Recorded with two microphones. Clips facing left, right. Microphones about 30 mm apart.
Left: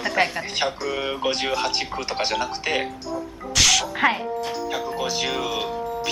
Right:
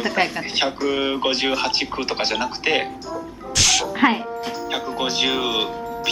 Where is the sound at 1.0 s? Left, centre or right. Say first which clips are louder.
Right 1 dB; right.